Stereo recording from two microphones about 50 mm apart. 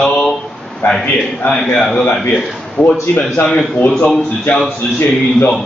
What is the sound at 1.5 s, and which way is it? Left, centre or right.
Speech, centre.